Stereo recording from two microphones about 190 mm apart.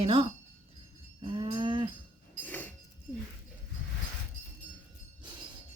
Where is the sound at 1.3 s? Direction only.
25° right (ahead or behind).